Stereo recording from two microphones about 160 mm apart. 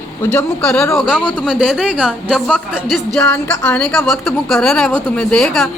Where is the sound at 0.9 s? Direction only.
5° right (ahead or behind).